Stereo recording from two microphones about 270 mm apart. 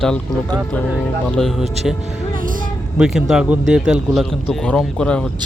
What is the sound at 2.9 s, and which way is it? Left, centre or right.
Speech, centre.